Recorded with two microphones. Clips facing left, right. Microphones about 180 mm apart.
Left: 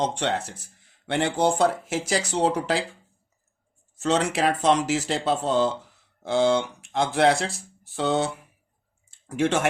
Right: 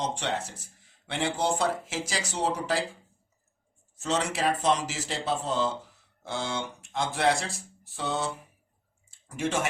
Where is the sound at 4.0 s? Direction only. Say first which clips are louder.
Left 5 dB; 60° left (ahead or behind).